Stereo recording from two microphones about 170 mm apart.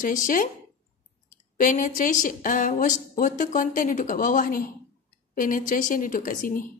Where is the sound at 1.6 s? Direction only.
50° left (ahead or behind).